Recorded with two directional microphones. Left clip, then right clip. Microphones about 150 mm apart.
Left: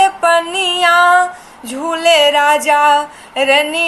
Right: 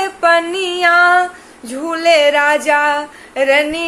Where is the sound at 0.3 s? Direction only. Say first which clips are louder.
Left 2 dB; 55° right (ahead or behind).